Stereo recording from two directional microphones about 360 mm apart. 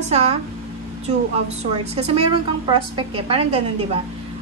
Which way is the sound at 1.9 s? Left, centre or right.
Centre.